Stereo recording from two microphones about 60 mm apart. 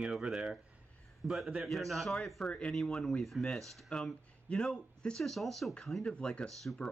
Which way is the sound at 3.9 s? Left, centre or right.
Centre.